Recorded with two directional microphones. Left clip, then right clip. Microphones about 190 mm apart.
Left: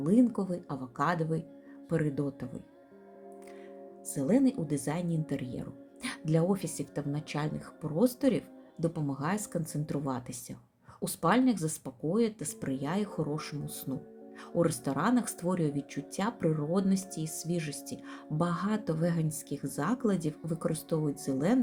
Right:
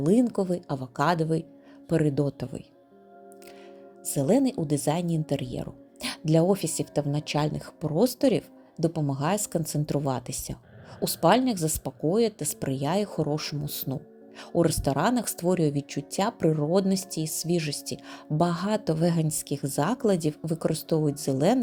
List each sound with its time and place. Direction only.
0.0 s speech: 40° right (ahead or behind)
4.1 s speech: 40° right (ahead or behind)